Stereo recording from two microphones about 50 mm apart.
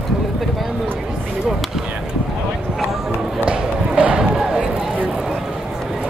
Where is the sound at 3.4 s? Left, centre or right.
Right.